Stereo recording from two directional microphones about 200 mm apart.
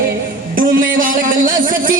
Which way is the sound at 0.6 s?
45° right (ahead or behind).